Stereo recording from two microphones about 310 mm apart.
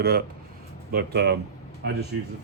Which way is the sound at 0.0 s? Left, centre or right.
Right.